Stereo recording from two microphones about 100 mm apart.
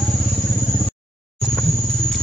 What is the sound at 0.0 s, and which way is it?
Vehicle, 5° left (ahead or behind).